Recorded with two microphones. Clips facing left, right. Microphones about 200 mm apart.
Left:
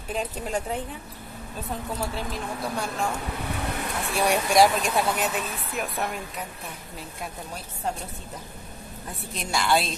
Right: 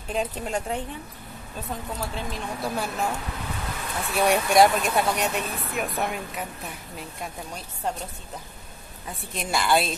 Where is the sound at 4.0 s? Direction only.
Centre (ahead or behind).